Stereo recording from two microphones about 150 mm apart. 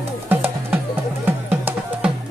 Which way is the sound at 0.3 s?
10° right (ahead or behind).